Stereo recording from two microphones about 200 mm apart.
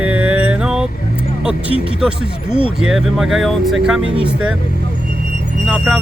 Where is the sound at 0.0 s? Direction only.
10° right (ahead or behind).